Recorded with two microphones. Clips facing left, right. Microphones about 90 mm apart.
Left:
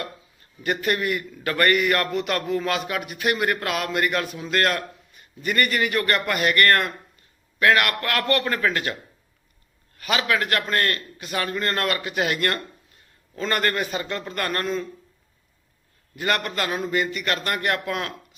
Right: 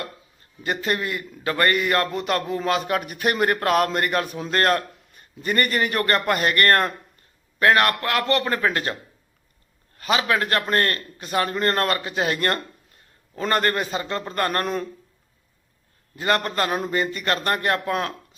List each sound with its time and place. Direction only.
0.6 s a man's voice: 25° right (ahead or behind)
2.9 s a man's voice: 40° right (ahead or behind)
10.0 s a man's voice: 30° right (ahead or behind)
14.6 s speech: 55° right (ahead or behind)
16.1 s a man's voice: 30° right (ahead or behind)